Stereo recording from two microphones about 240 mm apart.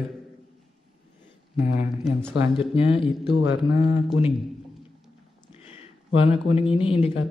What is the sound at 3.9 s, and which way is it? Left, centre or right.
Speech, centre.